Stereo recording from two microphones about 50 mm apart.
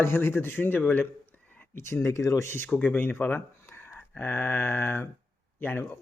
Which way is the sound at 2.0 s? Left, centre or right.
Left.